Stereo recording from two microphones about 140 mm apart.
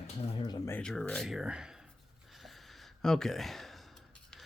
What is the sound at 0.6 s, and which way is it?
Speech, 15° left (ahead or behind).